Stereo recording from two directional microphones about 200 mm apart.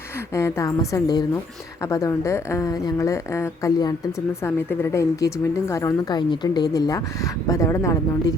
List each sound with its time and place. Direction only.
0.3 s a woman's voice: 15° left (ahead or behind)